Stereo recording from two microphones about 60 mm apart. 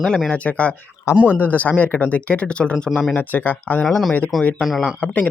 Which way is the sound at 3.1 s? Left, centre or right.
Left.